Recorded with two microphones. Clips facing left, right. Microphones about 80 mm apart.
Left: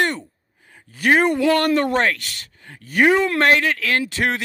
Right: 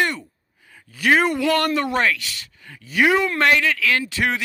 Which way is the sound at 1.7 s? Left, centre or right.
Left.